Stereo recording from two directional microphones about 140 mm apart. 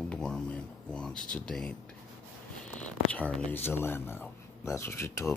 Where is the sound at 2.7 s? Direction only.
10° left (ahead or behind).